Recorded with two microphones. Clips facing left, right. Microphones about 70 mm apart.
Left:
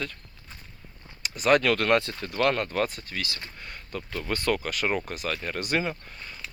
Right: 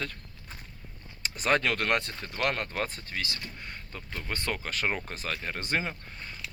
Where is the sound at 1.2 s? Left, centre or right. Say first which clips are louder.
Left 4 dB; right.